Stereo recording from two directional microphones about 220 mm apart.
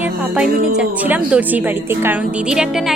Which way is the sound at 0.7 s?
5° right (ahead or behind).